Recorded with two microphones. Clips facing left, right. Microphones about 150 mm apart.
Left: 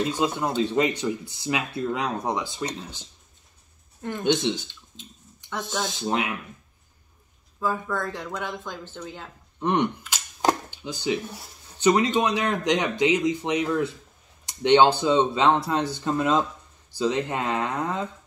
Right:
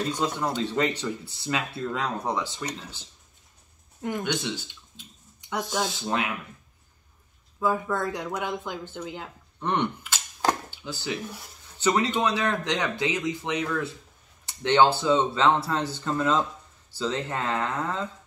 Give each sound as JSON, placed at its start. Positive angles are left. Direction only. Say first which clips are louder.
{"t": 0.1, "sound": "speech", "louder": "left 2 dB", "side_deg": 10}
{"t": 4.2, "sound": "speech", "louder": "left 12 dB", "side_deg": 20}
{"t": 5.5, "sound": "speech", "louder": "right 2 dB", "side_deg": -15}
{"t": 5.9, "sound": "speech", "louder": "left 2 dB", "side_deg": 20}
{"t": 7.6, "sound": "speech", "louder": "right 1 dB", "side_deg": -10}
{"t": 9.6, "sound": "arrow", "louder": "left 3 dB", "side_deg": 15}
{"t": 11.8, "sound": "speech", "louder": "left 3 dB", "side_deg": 15}